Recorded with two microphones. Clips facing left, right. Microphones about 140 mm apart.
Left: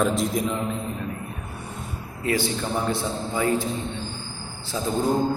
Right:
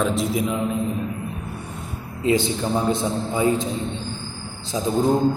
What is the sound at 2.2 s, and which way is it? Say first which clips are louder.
A man's voice: right 4 dB; 20° right (ahead or behind).